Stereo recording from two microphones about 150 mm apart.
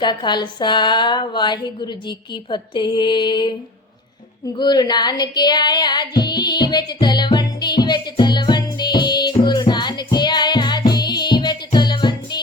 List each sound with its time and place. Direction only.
0.0 s a woman's voice: 30° left (ahead or behind)
4.5 s music: 30° left (ahead or behind)